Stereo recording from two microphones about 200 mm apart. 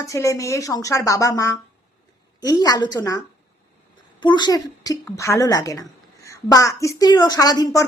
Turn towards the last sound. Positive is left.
turn(degrees=20)  # may be behind; listen again after turning